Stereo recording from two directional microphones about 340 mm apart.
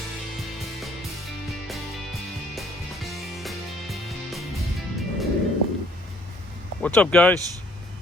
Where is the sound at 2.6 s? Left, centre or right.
Centre.